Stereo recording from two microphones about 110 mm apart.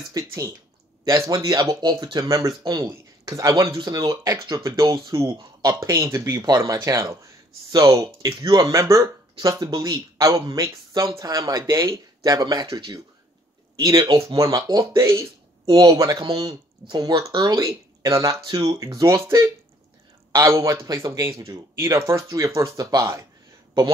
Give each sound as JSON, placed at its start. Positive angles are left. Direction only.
{"t": 0.0, "sound": "speech", "side_deg": -30}
{"t": 13.7, "sound": "speech", "side_deg": -35}